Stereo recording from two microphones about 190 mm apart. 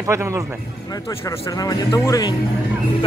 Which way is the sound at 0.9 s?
15° left (ahead or behind).